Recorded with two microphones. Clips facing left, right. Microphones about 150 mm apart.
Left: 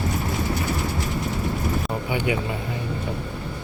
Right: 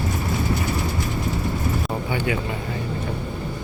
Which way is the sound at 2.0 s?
15° left (ahead or behind).